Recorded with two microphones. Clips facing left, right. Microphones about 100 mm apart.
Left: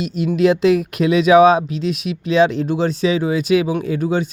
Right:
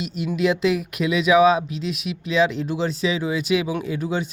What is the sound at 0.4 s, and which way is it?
Speech, 30° left (ahead or behind).